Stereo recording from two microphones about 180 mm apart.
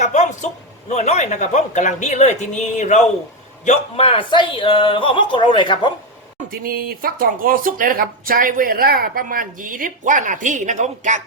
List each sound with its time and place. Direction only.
0.0 s a sound: 40° left (ahead or behind)
0.9 s speech: 40° left (ahead or behind)
6.5 s speech: 55° right (ahead or behind)